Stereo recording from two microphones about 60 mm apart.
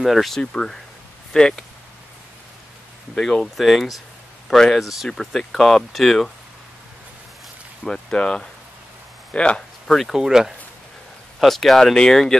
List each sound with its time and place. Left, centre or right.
0.0 s speech: centre
0.4 s speech: centre
3.2 s speech: centre
7.8 s speech: centre
9.8 s speech: centre
11.3 s speech: centre